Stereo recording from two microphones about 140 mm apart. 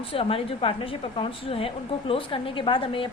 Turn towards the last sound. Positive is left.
turn(degrees=40)  # may be behind; listen again after turning